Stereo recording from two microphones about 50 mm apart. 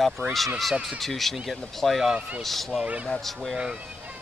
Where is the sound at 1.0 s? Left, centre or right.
Centre.